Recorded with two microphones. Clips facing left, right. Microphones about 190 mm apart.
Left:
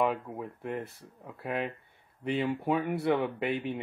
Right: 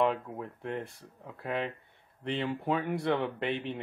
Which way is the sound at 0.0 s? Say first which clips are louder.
Even; centre (ahead or behind).